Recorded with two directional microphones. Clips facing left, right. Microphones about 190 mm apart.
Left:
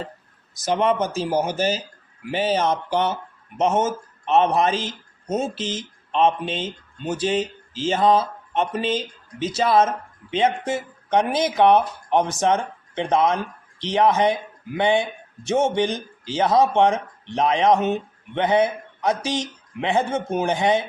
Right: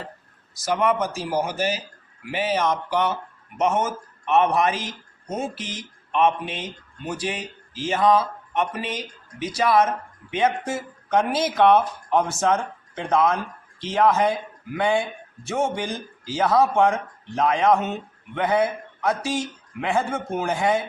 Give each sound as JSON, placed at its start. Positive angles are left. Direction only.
{"t": 0.6, "sound": "a man's voice", "side_deg": 25}